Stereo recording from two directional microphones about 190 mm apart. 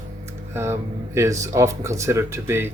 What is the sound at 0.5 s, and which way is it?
Speech, 15° right (ahead or behind).